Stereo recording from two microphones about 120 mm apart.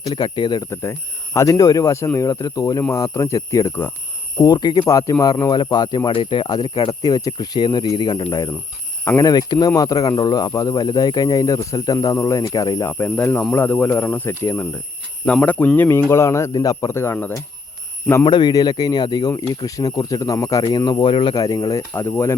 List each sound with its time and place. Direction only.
0.0 s speech: 35° left (ahead or behind)
0.7 s speech: 25° left (ahead or behind)
4.4 s speech: 35° left (ahead or behind)
6.1 s speech: 45° left (ahead or behind); by 12.9 s 30° left (ahead or behind)
12.9 s speech: 15° left (ahead or behind)
18.3 s speech: 40° left (ahead or behind)
21.1 s speech: 45° left (ahead or behind)
21.3 s speech: 30° left (ahead or behind)
21.9 s speech: 20° left (ahead or behind)